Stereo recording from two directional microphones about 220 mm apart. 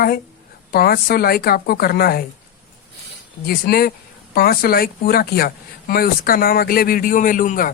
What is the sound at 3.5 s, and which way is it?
Speech, 40° left (ahead or behind).